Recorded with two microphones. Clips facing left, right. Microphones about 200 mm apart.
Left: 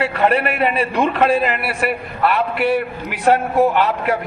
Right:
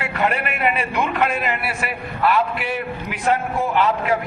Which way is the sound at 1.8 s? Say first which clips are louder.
Left 5 dB; 60° left (ahead or behind).